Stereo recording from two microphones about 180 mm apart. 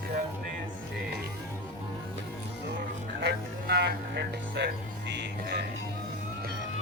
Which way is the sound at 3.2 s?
65° right (ahead or behind).